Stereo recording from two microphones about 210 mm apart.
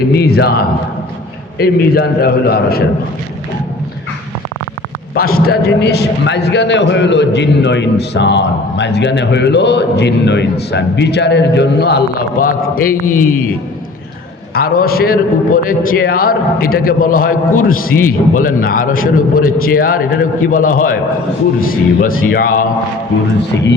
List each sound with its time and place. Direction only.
0.1 s a man's voice: 50° left (ahead or behind)
1.5 s a man's voice: 50° left (ahead or behind)
5.1 s a man's voice: 45° left (ahead or behind)
14.5 s a man's voice: 45° left (ahead or behind)